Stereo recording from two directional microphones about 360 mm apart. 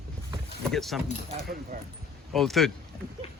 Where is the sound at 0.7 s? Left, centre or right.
Centre.